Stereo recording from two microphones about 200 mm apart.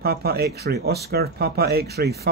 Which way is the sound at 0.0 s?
50° right (ahead or behind).